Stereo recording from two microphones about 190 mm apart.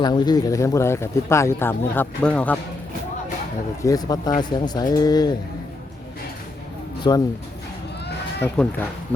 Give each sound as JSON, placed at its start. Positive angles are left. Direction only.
{"t": 0.0, "sound": "speech", "side_deg": 20}
{"t": 3.8, "sound": "speech", "side_deg": 20}
{"t": 7.1, "sound": "speech", "side_deg": 20}
{"t": 8.4, "sound": "speech", "side_deg": 10}